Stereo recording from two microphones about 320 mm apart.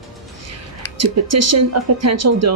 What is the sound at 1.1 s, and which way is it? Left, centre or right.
Speech, right.